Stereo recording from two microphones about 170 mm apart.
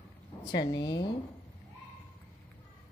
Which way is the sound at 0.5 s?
25° left (ahead or behind).